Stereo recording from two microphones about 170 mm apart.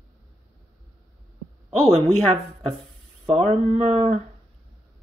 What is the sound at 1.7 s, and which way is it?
Speech, 40° right (ahead or behind).